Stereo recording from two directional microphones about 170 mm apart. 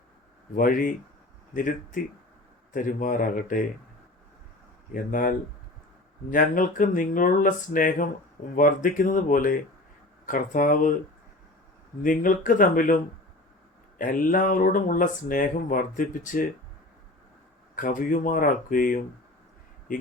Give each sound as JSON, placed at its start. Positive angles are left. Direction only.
{"t": 0.5, "sound": "speech", "side_deg": 55}
{"t": 4.9, "sound": "speech", "side_deg": 55}
{"t": 6.3, "sound": "speech", "side_deg": 55}
{"t": 12.0, "sound": "speech", "side_deg": 50}
{"t": 14.0, "sound": "speech", "side_deg": 55}
{"t": 17.7, "sound": "speech", "side_deg": 50}